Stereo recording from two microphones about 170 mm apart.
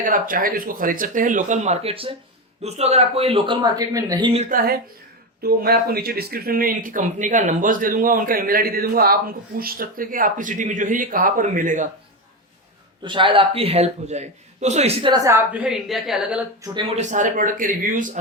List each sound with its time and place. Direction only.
0.0 s speech: 55° right (ahead or behind); by 4.3 s 20° right (ahead or behind)
4.4 s speech: 60° right (ahead or behind)
13.1 s speech: 30° right (ahead or behind)
15.1 s a woman's voice: 20° right (ahead or behind)
15.5 s a woman's voice: 5° right (ahead or behind)
16.9 s speech: 45° right (ahead or behind)